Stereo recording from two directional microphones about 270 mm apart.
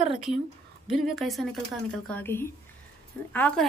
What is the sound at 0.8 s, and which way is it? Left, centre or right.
Speech, centre.